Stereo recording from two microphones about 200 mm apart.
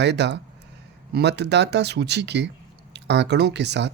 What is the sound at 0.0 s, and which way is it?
Speech, 60° right (ahead or behind).